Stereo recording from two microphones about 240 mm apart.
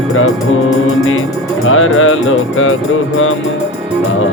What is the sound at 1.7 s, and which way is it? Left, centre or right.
Music, left.